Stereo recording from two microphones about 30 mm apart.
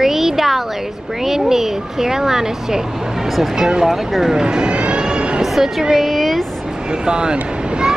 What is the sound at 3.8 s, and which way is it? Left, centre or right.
Speech, centre.